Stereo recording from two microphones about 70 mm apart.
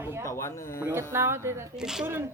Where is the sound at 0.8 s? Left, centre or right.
Right.